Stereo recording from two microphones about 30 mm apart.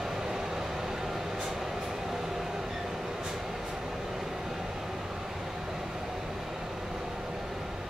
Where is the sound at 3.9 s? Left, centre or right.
Centre.